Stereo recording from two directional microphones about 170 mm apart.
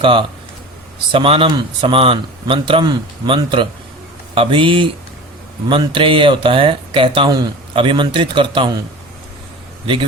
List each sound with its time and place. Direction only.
0.0 s speech: 30° right (ahead or behind)
9.8 s a man's voice: 30° right (ahead or behind)